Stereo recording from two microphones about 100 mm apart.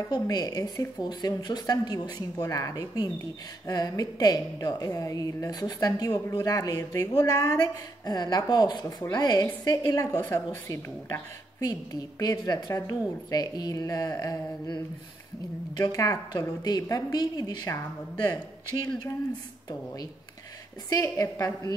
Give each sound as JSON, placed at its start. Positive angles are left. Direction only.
{"t": 0.1, "sound": "a woman's voice", "side_deg": 40}
{"t": 8.8, "sound": "a woman's voice", "side_deg": 35}
{"t": 15.8, "sound": "a woman's voice", "side_deg": 35}
{"t": 20.9, "sound": "a woman's voice", "side_deg": 35}